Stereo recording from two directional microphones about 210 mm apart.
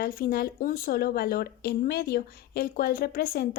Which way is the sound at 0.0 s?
45° left (ahead or behind).